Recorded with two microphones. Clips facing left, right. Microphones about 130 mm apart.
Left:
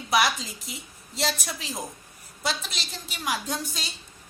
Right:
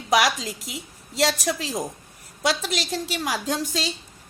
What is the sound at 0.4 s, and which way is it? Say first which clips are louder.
A woman's voice: right 6 dB; 90° right.